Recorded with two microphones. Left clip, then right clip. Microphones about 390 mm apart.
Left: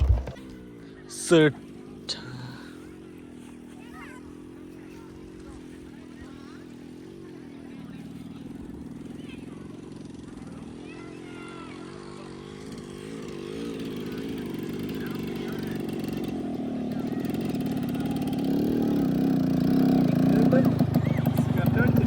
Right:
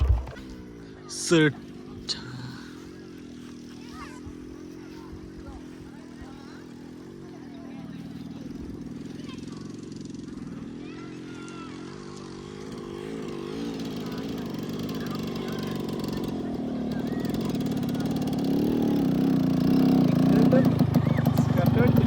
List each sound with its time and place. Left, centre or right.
1.1 s speech: centre
12.7 s vehicle: right
18.4 s vehicle: centre
21.0 s vehicle: centre